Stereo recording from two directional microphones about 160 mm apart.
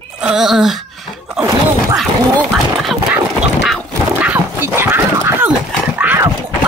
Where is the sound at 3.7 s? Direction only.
10° right (ahead or behind).